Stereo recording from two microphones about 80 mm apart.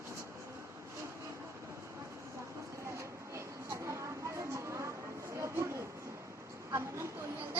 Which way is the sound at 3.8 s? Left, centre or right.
Right.